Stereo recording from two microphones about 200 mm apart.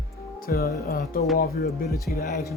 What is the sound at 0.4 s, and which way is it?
Speech, 50° left (ahead or behind).